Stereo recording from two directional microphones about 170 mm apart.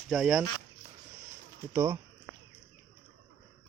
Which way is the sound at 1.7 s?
15° right (ahead or behind).